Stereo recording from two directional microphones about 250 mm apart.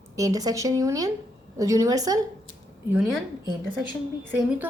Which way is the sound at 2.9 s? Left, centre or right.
Centre.